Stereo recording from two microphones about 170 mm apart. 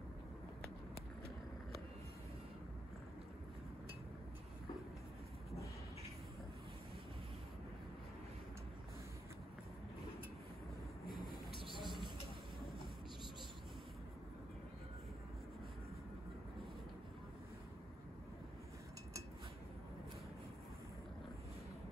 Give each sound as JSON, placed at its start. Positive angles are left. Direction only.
{"t": 11.6, "sound": "vehicle", "side_deg": -30}